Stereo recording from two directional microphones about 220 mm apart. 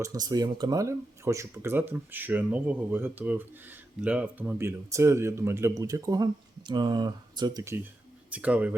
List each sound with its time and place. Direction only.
0.0 s speech: 15° right (ahead or behind)